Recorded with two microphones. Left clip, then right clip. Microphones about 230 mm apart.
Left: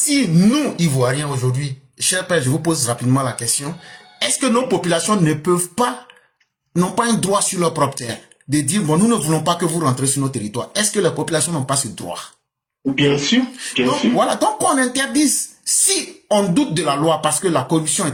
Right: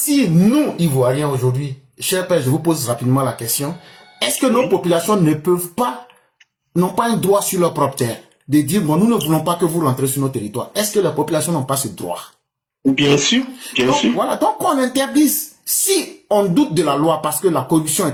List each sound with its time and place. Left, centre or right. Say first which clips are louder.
0.2 s speech: right 4 dB; left
13.0 s speech: right 1 dB; right
14.2 s speech: left 1 dB; left